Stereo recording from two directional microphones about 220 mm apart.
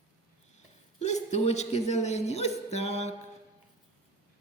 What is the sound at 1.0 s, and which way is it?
A woman's voice, 30° left (ahead or behind).